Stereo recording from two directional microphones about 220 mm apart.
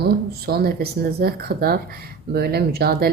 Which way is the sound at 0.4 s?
45° right (ahead or behind).